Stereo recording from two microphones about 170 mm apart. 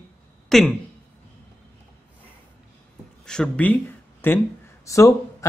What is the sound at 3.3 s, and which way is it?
Speech, 5° left (ahead or behind).